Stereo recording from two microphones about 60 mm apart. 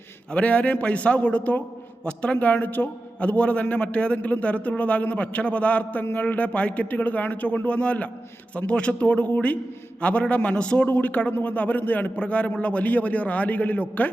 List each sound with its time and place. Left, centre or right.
0.3 s a man's voice: left
3.2 s a man's voice: left
10.8 s a man's voice: left